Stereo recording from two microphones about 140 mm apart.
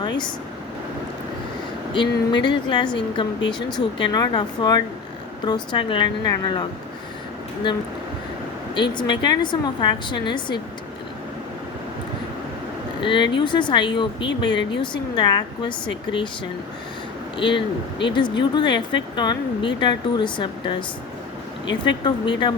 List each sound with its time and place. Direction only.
1.9 s speech: 35° left (ahead or behind)
8.7 s speech: 35° left (ahead or behind)
13.0 s speech: 35° left (ahead or behind)
17.3 s speech: 35° left (ahead or behind)
21.8 s speech: 35° left (ahead or behind)